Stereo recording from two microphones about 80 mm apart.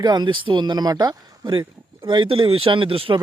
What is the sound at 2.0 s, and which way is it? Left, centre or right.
Speech, right.